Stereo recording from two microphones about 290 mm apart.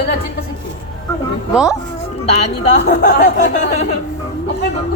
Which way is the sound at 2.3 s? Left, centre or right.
Left.